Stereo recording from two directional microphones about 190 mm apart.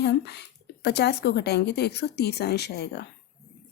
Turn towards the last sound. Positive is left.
turn(degrees=60)  # may be behind; listen again after turning